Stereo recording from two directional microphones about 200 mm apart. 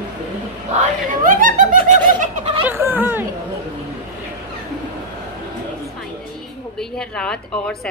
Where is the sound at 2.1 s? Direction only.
35° right (ahead or behind).